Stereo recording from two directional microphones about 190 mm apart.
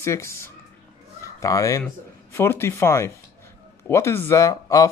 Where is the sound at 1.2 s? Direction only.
15° left (ahead or behind).